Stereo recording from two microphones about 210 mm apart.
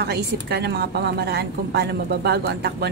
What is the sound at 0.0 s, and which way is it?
Speech, 50° right (ahead or behind).